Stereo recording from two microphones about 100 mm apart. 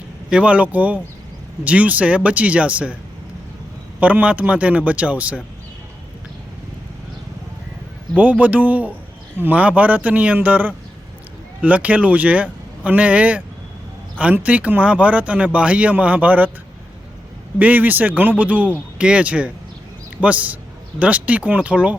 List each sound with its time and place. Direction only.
0.3 s speech: 10° right (ahead or behind)
4.0 s speech: 15° right (ahead or behind)
8.1 s speech: 15° right (ahead or behind)
17.6 s speech: 15° right (ahead or behind)